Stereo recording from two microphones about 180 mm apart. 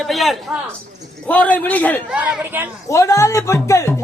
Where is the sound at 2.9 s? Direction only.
15° left (ahead or behind).